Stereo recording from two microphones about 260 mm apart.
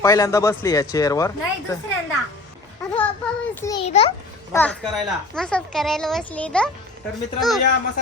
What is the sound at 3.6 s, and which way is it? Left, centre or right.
Speech, centre.